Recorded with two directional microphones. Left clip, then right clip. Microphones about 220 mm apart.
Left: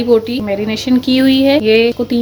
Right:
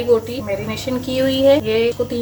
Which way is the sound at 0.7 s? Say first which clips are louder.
Left 8 dB; 45° left (ahead or behind).